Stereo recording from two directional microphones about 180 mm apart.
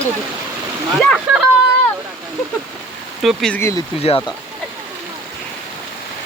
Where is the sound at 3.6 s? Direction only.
15° left (ahead or behind).